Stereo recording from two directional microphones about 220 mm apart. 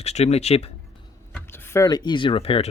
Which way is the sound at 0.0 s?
30° left (ahead or behind).